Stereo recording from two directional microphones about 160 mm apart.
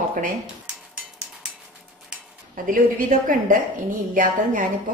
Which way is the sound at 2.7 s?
60° right (ahead or behind).